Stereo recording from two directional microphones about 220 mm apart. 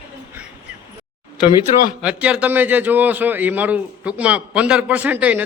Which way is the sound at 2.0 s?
5° right (ahead or behind).